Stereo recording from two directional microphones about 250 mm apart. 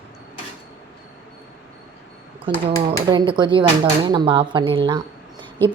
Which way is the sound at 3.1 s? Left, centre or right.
Centre.